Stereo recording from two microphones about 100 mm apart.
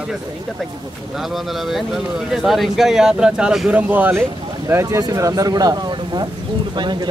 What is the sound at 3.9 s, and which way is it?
Speech, 20° right (ahead or behind).